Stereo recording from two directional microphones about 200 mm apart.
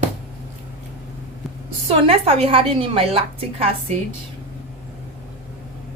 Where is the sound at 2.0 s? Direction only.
30° right (ahead or behind).